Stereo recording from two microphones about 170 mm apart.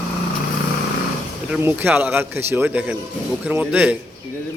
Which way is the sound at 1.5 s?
10° right (ahead or behind).